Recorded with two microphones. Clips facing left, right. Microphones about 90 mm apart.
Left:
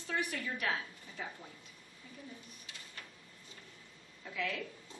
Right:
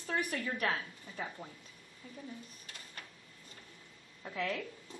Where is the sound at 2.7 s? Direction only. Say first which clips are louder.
Left 1 dB; 50° right (ahead or behind).